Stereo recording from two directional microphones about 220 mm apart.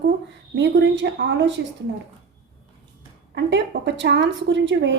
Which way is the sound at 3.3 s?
55° right (ahead or behind).